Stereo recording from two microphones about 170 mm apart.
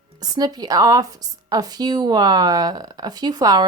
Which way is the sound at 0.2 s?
25° right (ahead or behind).